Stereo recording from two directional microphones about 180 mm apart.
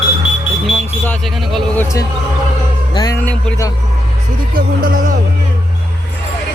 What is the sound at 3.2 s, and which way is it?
Speech, 10° left (ahead or behind).